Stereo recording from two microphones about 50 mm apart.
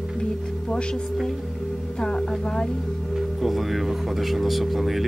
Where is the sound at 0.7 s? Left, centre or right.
Centre.